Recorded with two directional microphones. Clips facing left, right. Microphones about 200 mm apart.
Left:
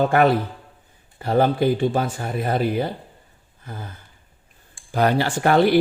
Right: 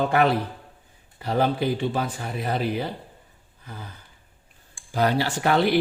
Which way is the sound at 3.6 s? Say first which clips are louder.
Left 4 dB; 45° left (ahead or behind).